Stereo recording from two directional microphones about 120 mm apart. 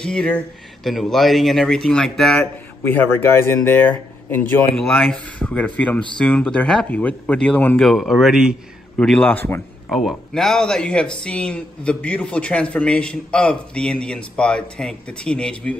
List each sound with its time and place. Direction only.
0.0 s a man's voice: 5° left (ahead or behind)
2.8 s a man's voice: 15° left (ahead or behind)
5.0 s a man's voice: 5° left (ahead or behind)
9.0 s a man's voice: 10° left (ahead or behind)
9.8 s a man's voice: centre (ahead or behind)